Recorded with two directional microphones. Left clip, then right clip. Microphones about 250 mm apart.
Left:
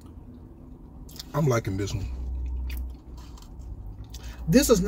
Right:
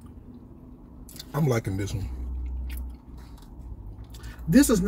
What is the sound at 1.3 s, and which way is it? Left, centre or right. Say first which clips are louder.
Speech: left 1 dB; right.